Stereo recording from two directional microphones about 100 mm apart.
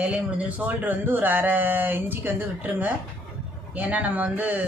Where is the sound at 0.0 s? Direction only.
15° right (ahead or behind).